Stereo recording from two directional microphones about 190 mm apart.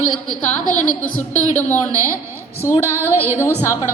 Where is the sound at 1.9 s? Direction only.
15° right (ahead or behind).